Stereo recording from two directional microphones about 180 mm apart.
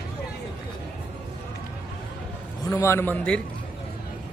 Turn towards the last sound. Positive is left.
turn(degrees=10)  # may be behind; listen again after turning